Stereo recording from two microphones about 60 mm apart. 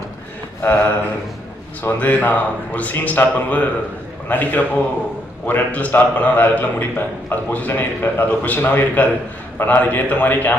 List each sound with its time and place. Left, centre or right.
0.6 s a man's voice: left